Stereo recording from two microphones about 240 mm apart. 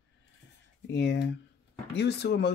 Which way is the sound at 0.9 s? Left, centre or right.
Left.